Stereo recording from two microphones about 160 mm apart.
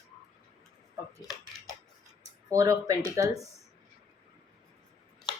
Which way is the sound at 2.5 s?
20° right (ahead or behind).